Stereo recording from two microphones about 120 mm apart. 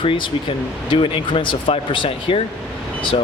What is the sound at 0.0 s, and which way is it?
Speech, 45° left (ahead or behind).